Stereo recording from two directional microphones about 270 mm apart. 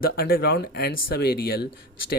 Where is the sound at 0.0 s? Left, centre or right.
Left.